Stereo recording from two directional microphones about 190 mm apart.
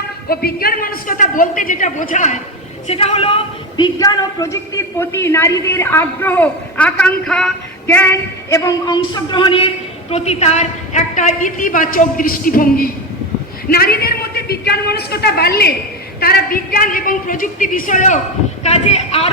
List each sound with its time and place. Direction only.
0.3 s a woman's voice: 50° left (ahead or behind); by 19.3 s 35° left (ahead or behind)